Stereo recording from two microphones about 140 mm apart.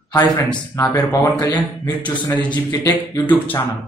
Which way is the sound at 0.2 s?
10° left (ahead or behind).